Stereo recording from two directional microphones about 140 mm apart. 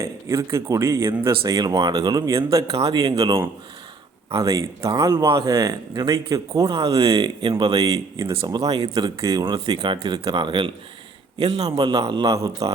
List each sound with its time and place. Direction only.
0.0 s a man's voice: 20° right (ahead or behind)
5.2 s speech: 35° right (ahead or behind)
8.3 s speech: 40° right (ahead or behind)